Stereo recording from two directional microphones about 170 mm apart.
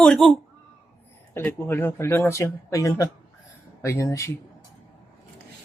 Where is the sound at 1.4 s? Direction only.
15° left (ahead or behind).